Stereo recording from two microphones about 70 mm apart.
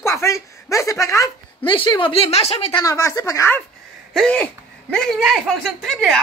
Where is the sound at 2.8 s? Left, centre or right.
Left.